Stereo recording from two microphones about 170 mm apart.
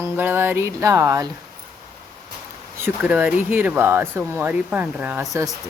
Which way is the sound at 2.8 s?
10° right (ahead or behind).